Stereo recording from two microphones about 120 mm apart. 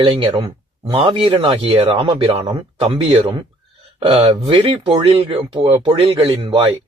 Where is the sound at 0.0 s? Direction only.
45° right (ahead or behind).